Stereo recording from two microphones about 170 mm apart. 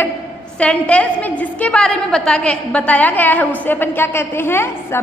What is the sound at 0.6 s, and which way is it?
A woman's voice, 10° left (ahead or behind).